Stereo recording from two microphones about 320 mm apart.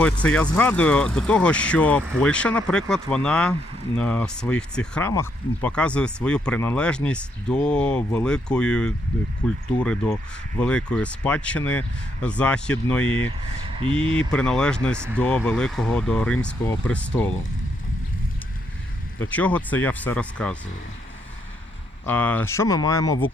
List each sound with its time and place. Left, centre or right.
0.0 s speech: centre
13.8 s speech: centre
14.2 s speech: centre
19.2 s speech: centre
22.0 s speech: centre